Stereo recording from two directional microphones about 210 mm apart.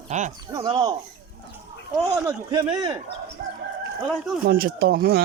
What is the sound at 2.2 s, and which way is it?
Speech, 20° right (ahead or behind).